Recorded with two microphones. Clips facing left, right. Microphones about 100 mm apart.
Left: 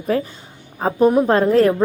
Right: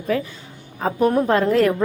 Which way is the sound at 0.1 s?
35° left (ahead or behind).